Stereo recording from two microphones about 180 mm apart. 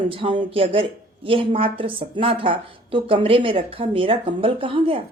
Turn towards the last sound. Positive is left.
turn(degrees=-30)  # may be behind; listen again after turning